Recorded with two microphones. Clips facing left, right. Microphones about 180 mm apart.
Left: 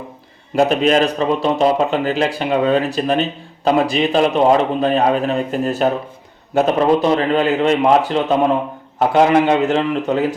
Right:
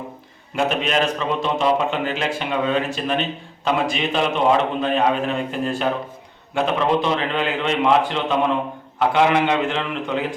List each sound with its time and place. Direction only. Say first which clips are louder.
0.5 s a man's voice: left 7 dB; 40° left (ahead or behind)